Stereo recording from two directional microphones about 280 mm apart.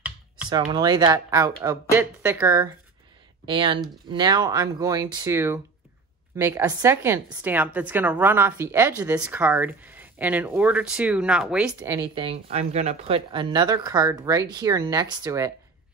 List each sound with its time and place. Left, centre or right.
0.5 s a woman's voice: centre